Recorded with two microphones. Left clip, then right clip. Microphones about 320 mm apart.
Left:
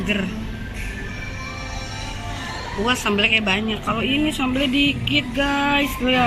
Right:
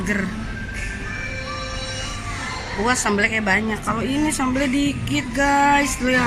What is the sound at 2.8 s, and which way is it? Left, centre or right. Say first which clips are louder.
Male singing: even; centre.